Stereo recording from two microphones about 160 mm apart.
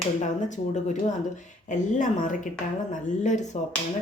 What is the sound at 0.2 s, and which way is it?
A woman's voice, 50° left (ahead or behind).